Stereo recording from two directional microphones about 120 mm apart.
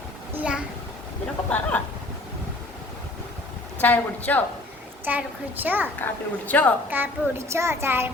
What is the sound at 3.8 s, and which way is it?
Speech, 15° left (ahead or behind).